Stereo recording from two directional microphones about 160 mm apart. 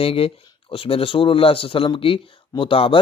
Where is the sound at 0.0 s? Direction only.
35° left (ahead or behind).